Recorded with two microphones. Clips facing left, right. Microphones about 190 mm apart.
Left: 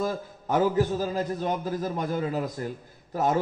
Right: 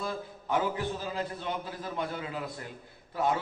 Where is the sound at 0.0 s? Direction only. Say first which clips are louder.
Left 6 dB; 40° left (ahead or behind).